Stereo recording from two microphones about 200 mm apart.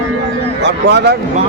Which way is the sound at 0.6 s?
55° right (ahead or behind).